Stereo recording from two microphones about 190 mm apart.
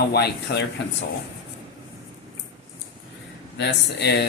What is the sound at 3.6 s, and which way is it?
Speech, 65° left (ahead or behind).